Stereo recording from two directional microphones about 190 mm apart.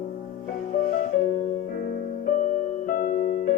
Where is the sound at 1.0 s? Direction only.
45° left (ahead or behind).